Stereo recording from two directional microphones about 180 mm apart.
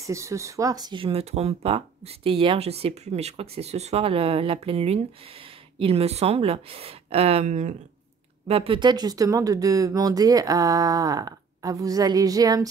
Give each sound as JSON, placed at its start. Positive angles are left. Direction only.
{"t": 0.0, "sound": "speech", "side_deg": -15}
{"t": 8.5, "sound": "speech", "side_deg": -30}